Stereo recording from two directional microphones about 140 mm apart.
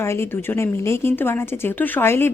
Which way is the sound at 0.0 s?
20° left (ahead or behind).